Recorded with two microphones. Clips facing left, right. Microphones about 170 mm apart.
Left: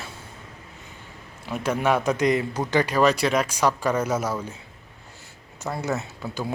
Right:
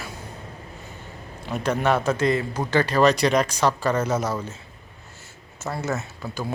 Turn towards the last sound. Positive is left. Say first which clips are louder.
# even
turn(degrees=15)  # may be behind; listen again after turning